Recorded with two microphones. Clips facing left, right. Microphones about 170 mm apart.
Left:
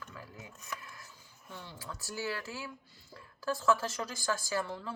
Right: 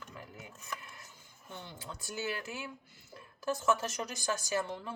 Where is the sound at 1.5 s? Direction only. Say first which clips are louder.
Even; 25° right (ahead or behind).